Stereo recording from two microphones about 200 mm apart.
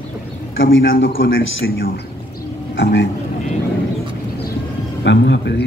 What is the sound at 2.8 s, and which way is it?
Speech, 60° left (ahead or behind).